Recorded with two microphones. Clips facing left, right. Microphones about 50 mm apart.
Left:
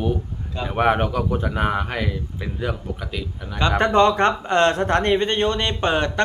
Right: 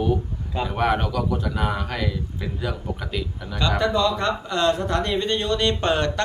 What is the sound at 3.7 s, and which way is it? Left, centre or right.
Speech, left.